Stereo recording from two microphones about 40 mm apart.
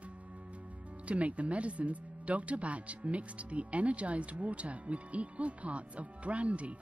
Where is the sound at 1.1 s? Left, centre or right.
Right.